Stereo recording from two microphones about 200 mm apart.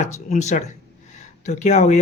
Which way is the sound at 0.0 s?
35° left (ahead or behind).